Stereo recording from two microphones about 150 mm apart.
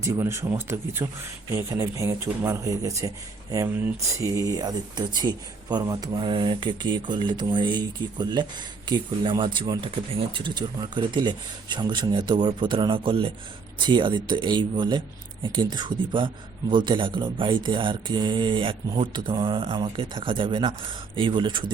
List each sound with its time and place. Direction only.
0.0 s speech: 20° right (ahead or behind)